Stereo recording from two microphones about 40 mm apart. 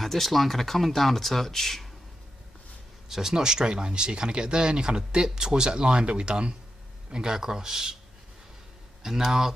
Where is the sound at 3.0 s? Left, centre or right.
Centre.